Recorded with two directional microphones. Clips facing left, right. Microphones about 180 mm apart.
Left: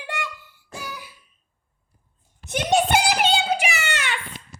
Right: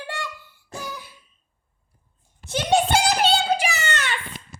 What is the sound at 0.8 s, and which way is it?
Cough, 10° left (ahead or behind).